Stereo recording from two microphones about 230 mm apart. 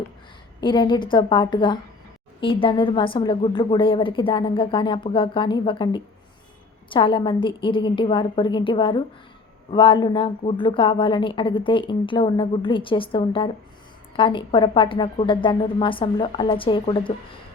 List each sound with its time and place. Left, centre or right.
0.6 s a woman's voice: left